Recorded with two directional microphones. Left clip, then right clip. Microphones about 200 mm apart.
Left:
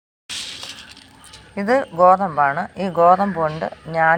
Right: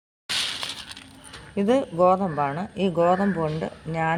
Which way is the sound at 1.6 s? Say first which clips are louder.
Left 5 dB; 10° left (ahead or behind).